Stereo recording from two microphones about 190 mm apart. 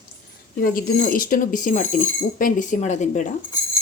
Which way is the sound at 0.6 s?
50° left (ahead or behind).